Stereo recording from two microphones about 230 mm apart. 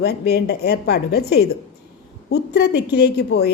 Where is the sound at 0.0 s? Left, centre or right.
Left.